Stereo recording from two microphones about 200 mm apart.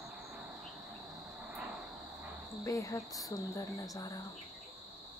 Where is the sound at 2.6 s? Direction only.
15° left (ahead or behind).